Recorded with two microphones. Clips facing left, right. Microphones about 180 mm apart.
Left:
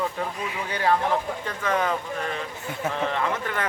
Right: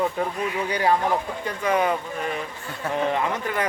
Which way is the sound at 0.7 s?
15° right (ahead or behind).